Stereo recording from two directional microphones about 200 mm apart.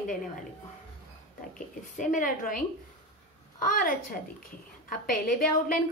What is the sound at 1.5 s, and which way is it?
A woman's voice, 40° left (ahead or behind).